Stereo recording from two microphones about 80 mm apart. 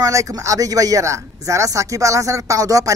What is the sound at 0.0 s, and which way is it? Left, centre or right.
Speech, right.